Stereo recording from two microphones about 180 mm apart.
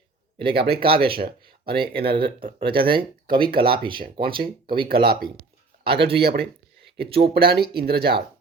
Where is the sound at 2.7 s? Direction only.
55° right (ahead or behind).